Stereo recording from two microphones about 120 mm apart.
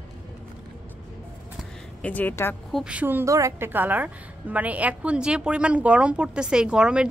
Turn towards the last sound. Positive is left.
turn(degrees=-10)  # may be behind; listen again after turning